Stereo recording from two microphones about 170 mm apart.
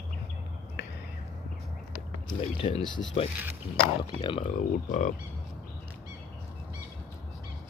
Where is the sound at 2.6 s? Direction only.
40° left (ahead or behind).